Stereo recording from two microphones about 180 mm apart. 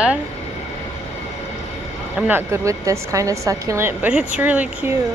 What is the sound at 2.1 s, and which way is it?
A woman's voice, 10° right (ahead or behind).